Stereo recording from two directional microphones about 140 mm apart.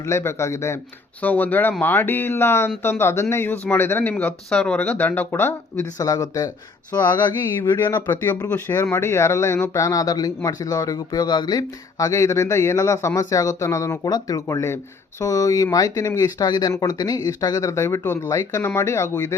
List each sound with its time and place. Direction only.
0.0 s speech: 20° left (ahead or behind)
6.9 s a sound: 30° left (ahead or behind)
7.8 s speech: 15° left (ahead or behind)